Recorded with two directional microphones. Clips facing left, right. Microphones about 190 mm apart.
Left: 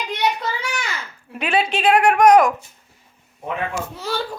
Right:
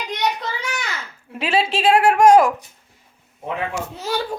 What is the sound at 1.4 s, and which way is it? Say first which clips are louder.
A woman's voice: even; 25° right (ahead or behind).